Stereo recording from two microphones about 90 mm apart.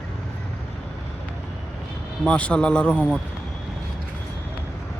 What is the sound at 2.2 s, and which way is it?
Speech, 10° left (ahead or behind).